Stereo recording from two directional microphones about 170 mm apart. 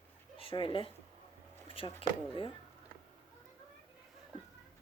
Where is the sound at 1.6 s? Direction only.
30° left (ahead or behind).